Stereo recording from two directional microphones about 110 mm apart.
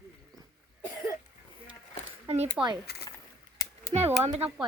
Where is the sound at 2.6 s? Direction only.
5° right (ahead or behind).